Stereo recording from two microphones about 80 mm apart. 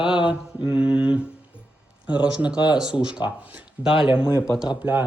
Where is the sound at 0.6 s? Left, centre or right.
Centre.